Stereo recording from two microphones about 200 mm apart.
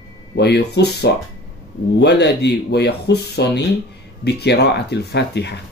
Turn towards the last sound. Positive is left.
turn(degrees=55)  # may be behind; listen again after turning